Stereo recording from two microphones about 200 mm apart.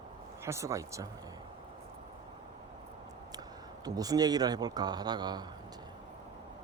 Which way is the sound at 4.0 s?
20° right (ahead or behind).